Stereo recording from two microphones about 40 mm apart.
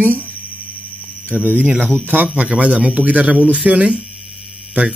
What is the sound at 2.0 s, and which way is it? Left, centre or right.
Speech, right.